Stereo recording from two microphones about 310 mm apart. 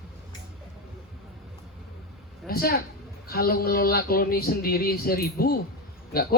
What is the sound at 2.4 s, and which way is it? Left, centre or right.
Speech, left.